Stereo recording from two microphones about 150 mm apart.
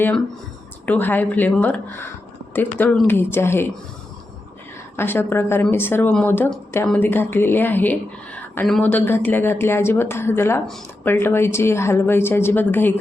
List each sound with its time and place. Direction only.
0.9 s speech: 10° left (ahead or behind)
4.9 s speech: 15° left (ahead or behind)